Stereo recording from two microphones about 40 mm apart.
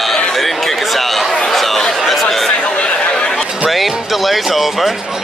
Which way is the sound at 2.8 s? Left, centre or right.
Centre.